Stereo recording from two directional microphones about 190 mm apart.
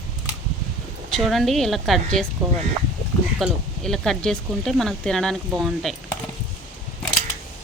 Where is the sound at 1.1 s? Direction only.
Centre (ahead or behind).